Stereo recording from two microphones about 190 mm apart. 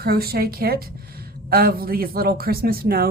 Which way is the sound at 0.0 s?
55° right (ahead or behind).